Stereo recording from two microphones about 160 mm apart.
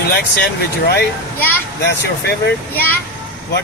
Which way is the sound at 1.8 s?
90° left.